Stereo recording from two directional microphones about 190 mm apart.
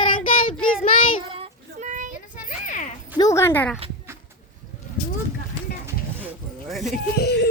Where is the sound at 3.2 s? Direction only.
15° left (ahead or behind).